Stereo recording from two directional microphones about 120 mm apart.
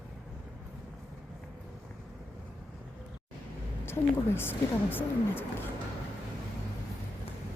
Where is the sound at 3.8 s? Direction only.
20° left (ahead or behind).